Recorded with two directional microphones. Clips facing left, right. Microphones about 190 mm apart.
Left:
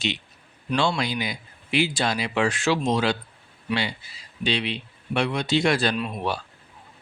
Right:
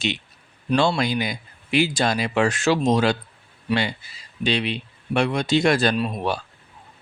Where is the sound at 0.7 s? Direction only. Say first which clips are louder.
Right 4 dB; 45° right (ahead or behind).